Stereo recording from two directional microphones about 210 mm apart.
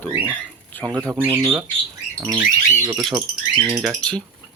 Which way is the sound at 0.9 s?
20° right (ahead or behind).